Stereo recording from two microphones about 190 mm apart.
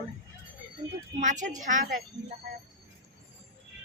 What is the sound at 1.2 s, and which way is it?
Speech, 40° right (ahead or behind).